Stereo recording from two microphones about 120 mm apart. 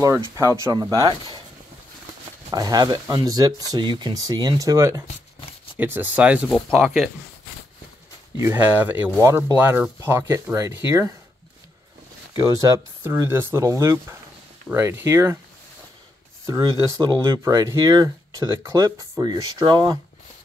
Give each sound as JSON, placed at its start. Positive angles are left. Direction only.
{"t": 0.0, "sound": "speech", "side_deg": -25}
{"t": 2.5, "sound": "speech", "side_deg": -35}
{"t": 5.8, "sound": "speech", "side_deg": -15}
{"t": 8.4, "sound": "speech", "side_deg": -20}
{"t": 9.6, "sound": "speech", "side_deg": -15}
{"t": 12.4, "sound": "speech", "side_deg": -25}
{"t": 16.4, "sound": "speech", "side_deg": -30}